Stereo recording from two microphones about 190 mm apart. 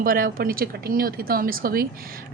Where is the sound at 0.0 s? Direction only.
50° right (ahead or behind).